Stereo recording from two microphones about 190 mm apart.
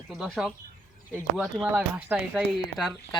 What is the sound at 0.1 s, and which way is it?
Speech, centre (ahead or behind).